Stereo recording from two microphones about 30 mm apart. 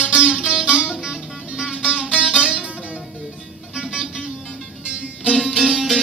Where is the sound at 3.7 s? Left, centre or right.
Right.